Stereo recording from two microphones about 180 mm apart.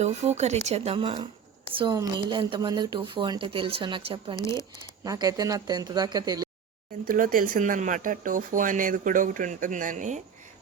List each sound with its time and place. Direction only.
0.0 s a woman's voice: 40° right (ahead or behind)
4.4 s speech: 15° left (ahead or behind)
5.0 s speech: 20° right (ahead or behind)
7.1 s speech: 50° right (ahead or behind)